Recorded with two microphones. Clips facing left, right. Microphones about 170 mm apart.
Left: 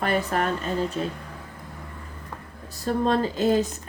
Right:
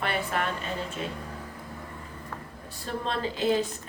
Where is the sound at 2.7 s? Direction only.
40° left (ahead or behind).